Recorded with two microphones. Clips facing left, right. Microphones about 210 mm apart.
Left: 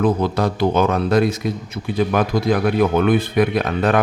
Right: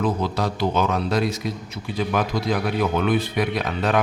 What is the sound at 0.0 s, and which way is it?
A man's voice, 55° left (ahead or behind).